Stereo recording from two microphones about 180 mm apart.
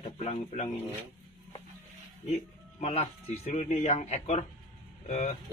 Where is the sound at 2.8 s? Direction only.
35° left (ahead or behind).